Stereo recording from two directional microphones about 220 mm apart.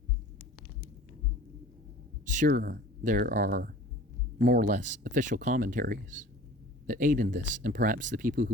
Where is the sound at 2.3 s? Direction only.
40° right (ahead or behind).